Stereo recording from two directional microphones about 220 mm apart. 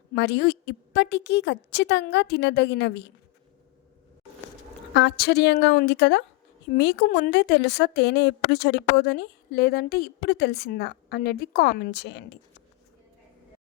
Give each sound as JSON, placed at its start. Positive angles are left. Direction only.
{"t": 0.1, "sound": "a woman's voice", "side_deg": 50}
{"t": 4.9, "sound": "a woman's voice", "side_deg": 50}